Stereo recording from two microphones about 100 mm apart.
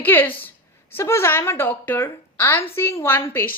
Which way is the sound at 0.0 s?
20° left (ahead or behind).